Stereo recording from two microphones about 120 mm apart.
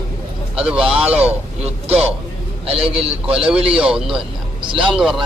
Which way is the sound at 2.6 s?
55° right (ahead or behind).